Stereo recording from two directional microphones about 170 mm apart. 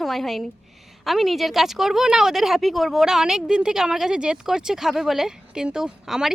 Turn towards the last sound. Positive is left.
turn(degrees=-5)  # may be behind; listen again after turning